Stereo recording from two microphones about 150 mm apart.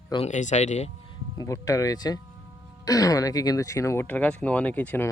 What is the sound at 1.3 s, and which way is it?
Speech, 20° left (ahead or behind).